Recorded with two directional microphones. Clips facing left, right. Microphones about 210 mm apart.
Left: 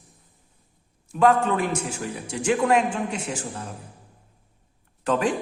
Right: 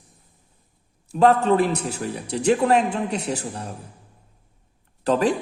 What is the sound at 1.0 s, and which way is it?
A man's voice, 35° right (ahead or behind).